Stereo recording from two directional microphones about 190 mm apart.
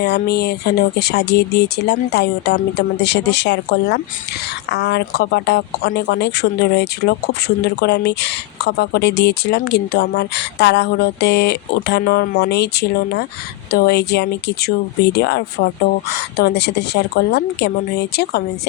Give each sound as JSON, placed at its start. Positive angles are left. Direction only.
{"t": 0.0, "sound": "speech", "side_deg": 60}
{"t": 12.4, "sound": "speech", "side_deg": 60}